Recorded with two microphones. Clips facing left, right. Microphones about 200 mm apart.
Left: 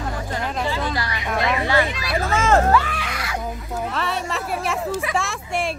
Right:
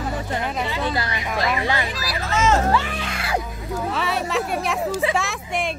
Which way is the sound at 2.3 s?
55° left (ahead or behind).